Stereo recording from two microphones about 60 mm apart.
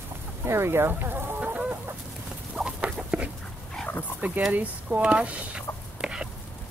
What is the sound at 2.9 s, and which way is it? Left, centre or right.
Dog, centre.